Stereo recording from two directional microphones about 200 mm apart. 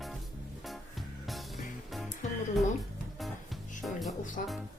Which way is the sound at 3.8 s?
Centre (ahead or behind).